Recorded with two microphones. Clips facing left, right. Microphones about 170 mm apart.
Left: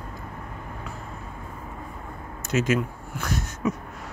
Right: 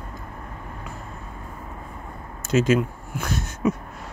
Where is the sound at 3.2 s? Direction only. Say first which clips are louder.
Right 3 dB; 25° right (ahead or behind).